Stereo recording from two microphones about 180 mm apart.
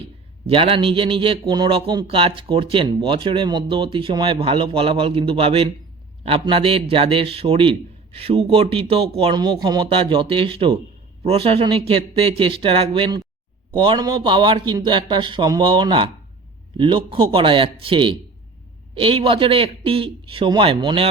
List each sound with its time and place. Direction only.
0.4 s a man's voice: 30° right (ahead or behind)